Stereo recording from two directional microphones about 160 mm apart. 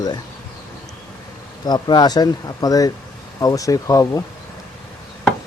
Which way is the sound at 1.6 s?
25° left (ahead or behind).